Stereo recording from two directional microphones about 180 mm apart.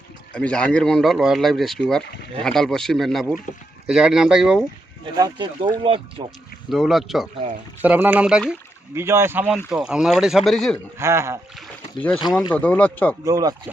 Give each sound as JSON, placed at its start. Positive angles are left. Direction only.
{"t": 0.3, "sound": "speech", "side_deg": 5}
{"t": 5.1, "sound": "speech", "side_deg": -20}
{"t": 6.7, "sound": "speech", "side_deg": 0}
{"t": 10.9, "sound": "speech", "side_deg": -15}
{"t": 11.9, "sound": "speech", "side_deg": 10}
{"t": 13.2, "sound": "speech", "side_deg": -20}